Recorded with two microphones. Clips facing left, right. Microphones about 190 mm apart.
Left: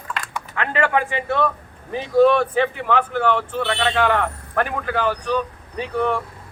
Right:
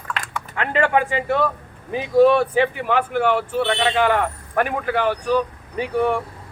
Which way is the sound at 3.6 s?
20° right (ahead or behind).